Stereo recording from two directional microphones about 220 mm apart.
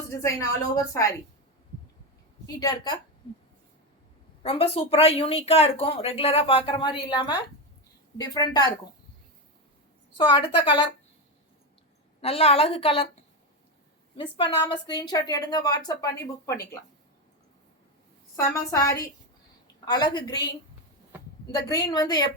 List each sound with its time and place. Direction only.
0.2 s a woman's voice: 15° left (ahead or behind)
2.6 s a woman's voice: 20° left (ahead or behind)
4.4 s a woman's voice: 25° left (ahead or behind)
10.2 s a woman's voice: 20° left (ahead or behind)
12.2 s a woman's voice: 25° left (ahead or behind)
14.2 s a woman's voice: 20° left (ahead or behind)
18.3 s a woman's voice: 15° left (ahead or behind)
21.4 s a woman's voice: 20° left (ahead or behind)